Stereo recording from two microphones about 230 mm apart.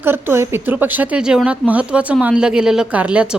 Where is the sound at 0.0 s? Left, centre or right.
Centre.